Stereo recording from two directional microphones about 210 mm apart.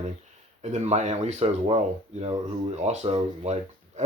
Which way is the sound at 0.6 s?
35° right (ahead or behind).